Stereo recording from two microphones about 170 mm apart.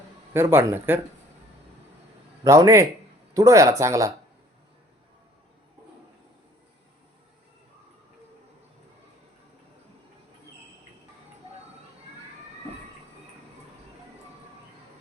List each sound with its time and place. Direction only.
0.3 s speech: 15° right (ahead or behind)
2.4 s speech: 20° right (ahead or behind)